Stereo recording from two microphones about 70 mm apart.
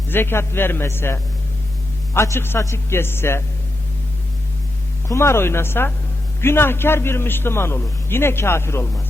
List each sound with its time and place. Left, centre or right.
0.1 s a man's voice: left
5.0 s a man's voice: left